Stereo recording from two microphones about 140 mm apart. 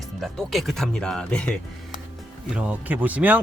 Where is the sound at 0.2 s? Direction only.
Centre (ahead or behind).